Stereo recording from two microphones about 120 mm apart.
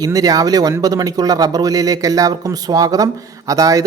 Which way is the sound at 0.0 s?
30° right (ahead or behind).